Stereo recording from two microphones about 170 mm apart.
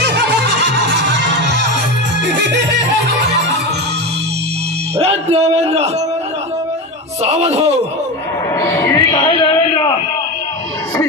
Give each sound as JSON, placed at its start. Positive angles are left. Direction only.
{"t": 0.0, "sound": "music", "side_deg": -80}
{"t": 4.9, "sound": "music", "side_deg": -40}
{"t": 7.2, "sound": "a man's voice", "side_deg": -40}
{"t": 8.5, "sound": "music", "side_deg": 20}